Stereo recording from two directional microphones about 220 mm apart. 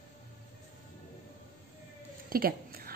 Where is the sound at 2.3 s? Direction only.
40° right (ahead or behind).